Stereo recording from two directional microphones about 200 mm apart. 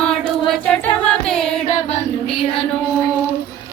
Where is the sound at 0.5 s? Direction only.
5° left (ahead or behind).